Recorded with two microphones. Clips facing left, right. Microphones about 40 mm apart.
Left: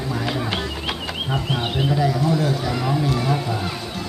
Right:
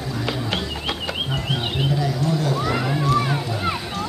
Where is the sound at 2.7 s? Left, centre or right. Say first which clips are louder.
Even; centre.